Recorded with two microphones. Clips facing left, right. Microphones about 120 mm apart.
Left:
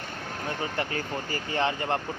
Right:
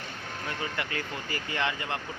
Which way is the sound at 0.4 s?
35° left (ahead or behind).